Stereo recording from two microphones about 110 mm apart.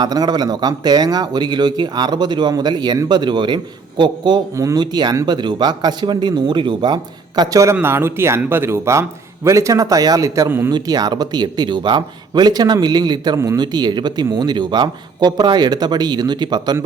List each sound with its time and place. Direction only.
0.0 s speech: 40° right (ahead or behind)
4.5 s speech: 35° right (ahead or behind)
7.6 s speech: 25° right (ahead or behind); by 16.7 s 40° right (ahead or behind)